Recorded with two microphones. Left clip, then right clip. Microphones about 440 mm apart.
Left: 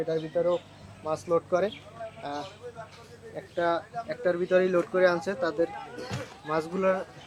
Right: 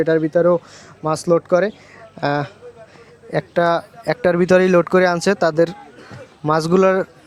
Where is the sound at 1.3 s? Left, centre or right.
Right.